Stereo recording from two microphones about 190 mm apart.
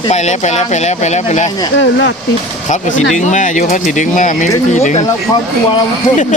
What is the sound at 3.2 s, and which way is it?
Speech, 40° left (ahead or behind).